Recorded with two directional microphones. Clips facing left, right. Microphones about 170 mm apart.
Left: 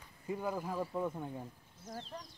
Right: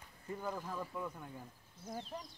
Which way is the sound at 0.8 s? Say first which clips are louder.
Left 6 dB; 30° left (ahead or behind).